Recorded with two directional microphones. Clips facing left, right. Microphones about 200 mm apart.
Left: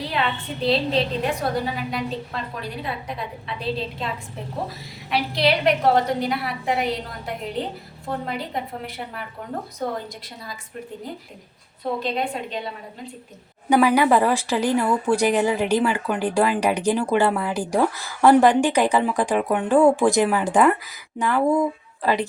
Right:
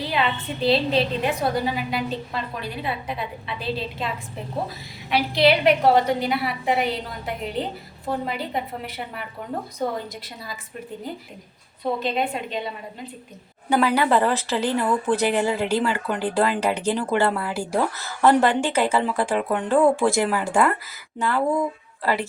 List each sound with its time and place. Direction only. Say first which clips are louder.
0.0 s a woman's voice: right 1 dB; centre (ahead or behind)
5.1 s a woman's voice: right 3 dB; centre (ahead or behind)
8.3 s a woman's voice: right 1 dB; centre (ahead or behind)
11.8 s a woman's voice: right 1 dB; centre (ahead or behind)
13.7 s a woman's voice: left 3 dB; 15° left (ahead or behind)